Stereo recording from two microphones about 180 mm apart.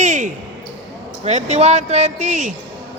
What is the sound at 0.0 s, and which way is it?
Basketball bounce, 40° right (ahead or behind).